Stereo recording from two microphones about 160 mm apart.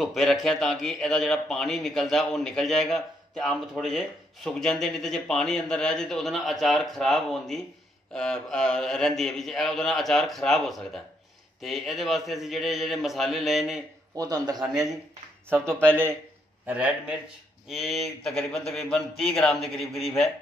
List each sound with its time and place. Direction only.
0.0 s a man's voice: centre (ahead or behind)
14.1 s a man's voice: 25° right (ahead or behind)
16.6 s a man's voice: 10° right (ahead or behind)